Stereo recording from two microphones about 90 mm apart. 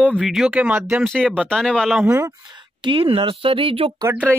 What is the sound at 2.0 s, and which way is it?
Speech, 35° right (ahead or behind).